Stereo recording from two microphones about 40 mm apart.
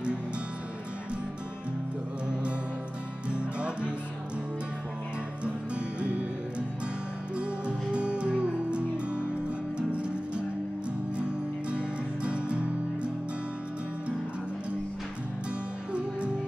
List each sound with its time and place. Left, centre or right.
3.3 s music: right
5.4 s music: right
7.3 s music: right
11.7 s music: right